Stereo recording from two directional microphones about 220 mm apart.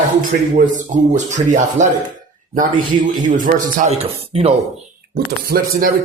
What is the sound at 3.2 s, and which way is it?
Speech, 35° right (ahead or behind).